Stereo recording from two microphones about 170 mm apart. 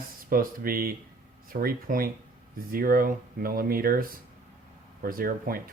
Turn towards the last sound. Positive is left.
turn(degrees=-60)  # may be behind; listen again after turning